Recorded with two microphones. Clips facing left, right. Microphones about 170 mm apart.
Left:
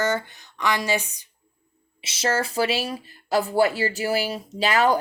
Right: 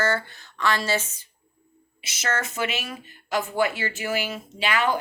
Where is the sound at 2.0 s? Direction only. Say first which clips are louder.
Left 4 dB; 30° left (ahead or behind).